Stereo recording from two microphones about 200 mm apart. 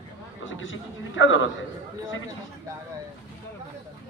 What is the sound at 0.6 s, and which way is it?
Speech, 75° left (ahead or behind).